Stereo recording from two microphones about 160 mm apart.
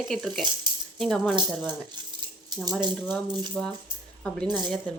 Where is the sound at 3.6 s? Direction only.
10° left (ahead or behind).